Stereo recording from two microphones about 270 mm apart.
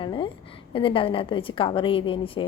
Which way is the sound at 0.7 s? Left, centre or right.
Centre.